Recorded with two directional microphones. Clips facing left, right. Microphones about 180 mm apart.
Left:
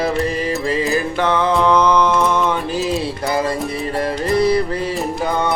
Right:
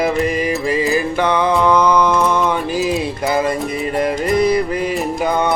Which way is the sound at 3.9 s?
20° right (ahead or behind).